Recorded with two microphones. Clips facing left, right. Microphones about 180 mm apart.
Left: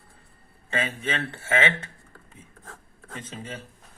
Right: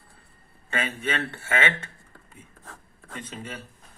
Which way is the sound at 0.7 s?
25° left (ahead or behind).